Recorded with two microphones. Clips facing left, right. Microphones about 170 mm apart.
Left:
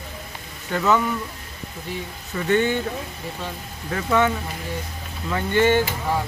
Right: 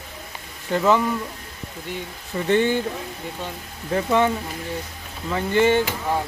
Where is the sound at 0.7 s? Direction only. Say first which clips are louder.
Right 2 dB; 25° right (ahead or behind).